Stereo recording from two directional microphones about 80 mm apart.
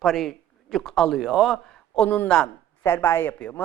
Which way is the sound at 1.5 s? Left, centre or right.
Centre.